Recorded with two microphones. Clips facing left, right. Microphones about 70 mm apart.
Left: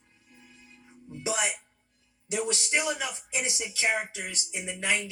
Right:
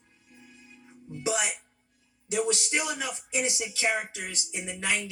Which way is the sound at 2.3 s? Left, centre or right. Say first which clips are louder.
Right 1 dB; left.